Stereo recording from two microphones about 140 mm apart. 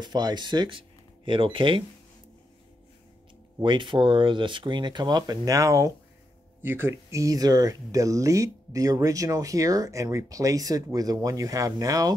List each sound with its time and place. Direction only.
0.0 s speech: 30° right (ahead or behind)
3.6 s speech: 35° right (ahead or behind)